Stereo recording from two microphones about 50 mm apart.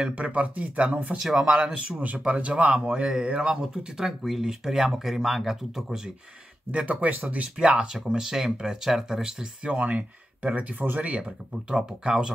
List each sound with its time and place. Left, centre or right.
0.0 s speech: right
1.2 s speech: centre
1.5 s speech: right; by 5.9 s centre
6.7 s speech: right
7.4 s speech: centre
11.1 s speech: centre